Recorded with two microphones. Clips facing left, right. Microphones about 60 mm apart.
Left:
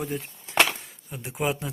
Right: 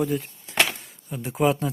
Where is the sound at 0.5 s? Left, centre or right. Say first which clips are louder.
Left 1 dB; centre.